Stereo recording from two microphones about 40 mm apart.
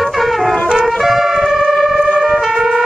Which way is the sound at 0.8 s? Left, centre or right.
Centre.